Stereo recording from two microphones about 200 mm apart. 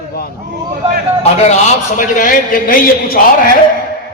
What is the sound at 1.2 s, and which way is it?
A man's voice, 35° left (ahead or behind).